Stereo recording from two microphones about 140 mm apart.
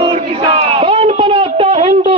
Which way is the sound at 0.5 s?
40° right (ahead or behind).